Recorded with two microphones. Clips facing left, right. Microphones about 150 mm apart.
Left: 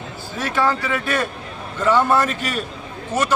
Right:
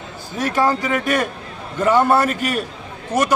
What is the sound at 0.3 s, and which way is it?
A man's voice, 15° right (ahead or behind).